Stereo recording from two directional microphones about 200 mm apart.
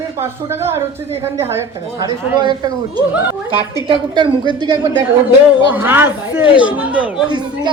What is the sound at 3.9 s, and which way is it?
Speech, 25° right (ahead or behind).